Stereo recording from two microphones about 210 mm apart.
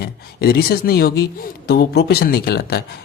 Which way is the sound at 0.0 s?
50° left (ahead or behind).